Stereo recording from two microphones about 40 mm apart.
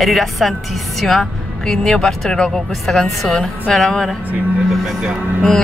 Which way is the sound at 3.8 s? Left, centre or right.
Centre.